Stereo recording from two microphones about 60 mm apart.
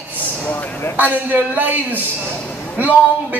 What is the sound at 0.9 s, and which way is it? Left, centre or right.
A man's voice, right.